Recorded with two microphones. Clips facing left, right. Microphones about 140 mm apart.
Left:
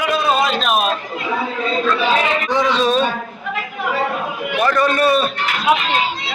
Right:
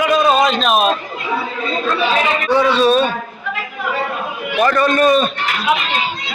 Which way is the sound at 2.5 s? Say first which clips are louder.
Right 5 dB; 15° left (ahead or behind).